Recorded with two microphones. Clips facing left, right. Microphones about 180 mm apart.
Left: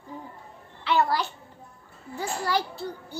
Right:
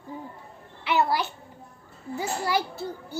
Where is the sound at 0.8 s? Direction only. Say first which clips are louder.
Even; 15° right (ahead or behind).